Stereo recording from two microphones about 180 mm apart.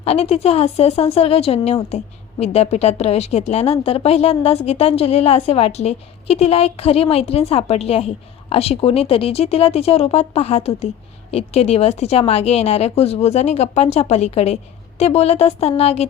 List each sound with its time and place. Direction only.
0.0 s a woman's voice: 35° left (ahead or behind)